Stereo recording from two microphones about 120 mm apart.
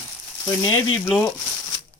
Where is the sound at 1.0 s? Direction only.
10° left (ahead or behind).